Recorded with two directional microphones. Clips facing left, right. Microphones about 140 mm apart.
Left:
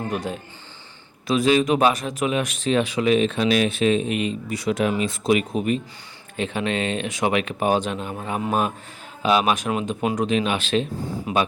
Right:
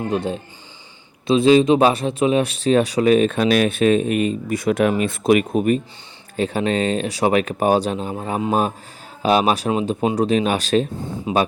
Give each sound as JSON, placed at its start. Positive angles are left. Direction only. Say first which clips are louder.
{"t": 0.1, "sound": "speech", "louder": "right 5 dB", "side_deg": -25}
{"t": 11.3, "sound": "speech", "louder": "right 3 dB", "side_deg": -25}